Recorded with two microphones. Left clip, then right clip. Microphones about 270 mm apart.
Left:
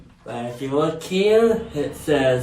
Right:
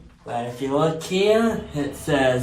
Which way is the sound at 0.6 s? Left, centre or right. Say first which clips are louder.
Even; right.